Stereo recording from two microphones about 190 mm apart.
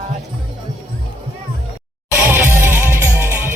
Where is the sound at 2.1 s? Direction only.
10° right (ahead or behind).